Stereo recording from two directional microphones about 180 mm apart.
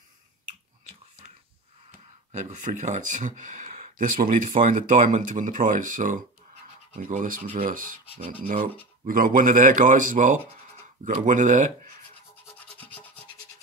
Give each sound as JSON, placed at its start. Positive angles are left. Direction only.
{"t": 2.3, "sound": "speech", "side_deg": -45}
{"t": 8.2, "sound": "rub", "side_deg": -30}
{"t": 9.0, "sound": "speech", "side_deg": -50}
{"t": 12.5, "sound": "a sound", "side_deg": 10}